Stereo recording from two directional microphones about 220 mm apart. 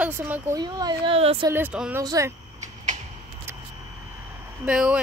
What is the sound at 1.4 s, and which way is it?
Speech, 10° right (ahead or behind).